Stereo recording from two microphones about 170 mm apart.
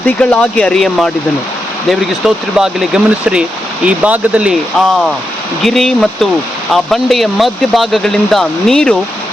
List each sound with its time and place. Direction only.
0.0 s speech: 10° left (ahead or behind)